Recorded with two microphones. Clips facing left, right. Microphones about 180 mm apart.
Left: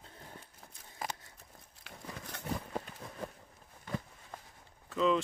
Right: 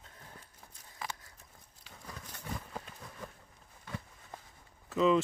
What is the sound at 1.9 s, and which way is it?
Horse, 65° left (ahead or behind).